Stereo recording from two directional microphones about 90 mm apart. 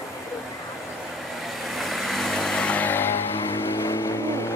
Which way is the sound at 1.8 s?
Centre (ahead or behind).